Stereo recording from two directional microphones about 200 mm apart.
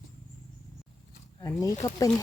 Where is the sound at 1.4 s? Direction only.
15° left (ahead or behind).